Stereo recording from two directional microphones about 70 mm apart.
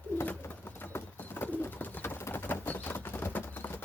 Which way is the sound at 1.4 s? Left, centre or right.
Left.